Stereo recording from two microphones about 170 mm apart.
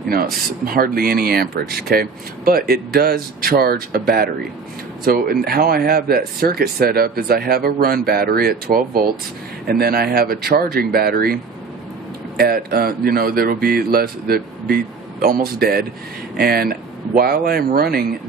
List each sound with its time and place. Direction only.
0.1 s speech: 60° right (ahead or behind)
12.4 s speech: 60° right (ahead or behind)